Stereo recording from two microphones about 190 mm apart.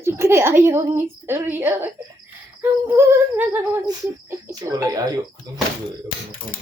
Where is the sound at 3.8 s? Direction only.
20° right (ahead or behind).